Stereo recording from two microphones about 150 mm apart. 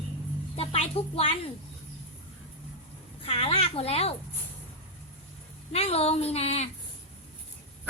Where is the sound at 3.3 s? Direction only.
40° left (ahead or behind).